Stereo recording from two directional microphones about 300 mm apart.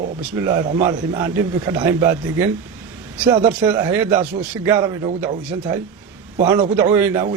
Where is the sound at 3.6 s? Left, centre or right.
Centre.